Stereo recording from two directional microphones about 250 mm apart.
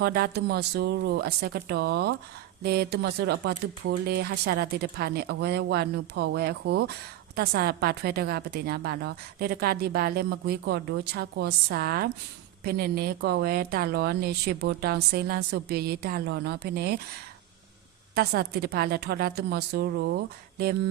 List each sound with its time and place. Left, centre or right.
0.0 s a woman's voice: right
18.1 s a woman's voice: right